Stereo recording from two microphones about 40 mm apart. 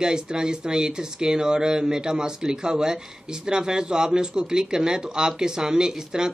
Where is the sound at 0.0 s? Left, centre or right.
Centre.